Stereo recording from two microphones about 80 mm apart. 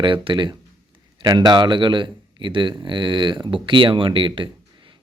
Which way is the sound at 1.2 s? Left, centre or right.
Right.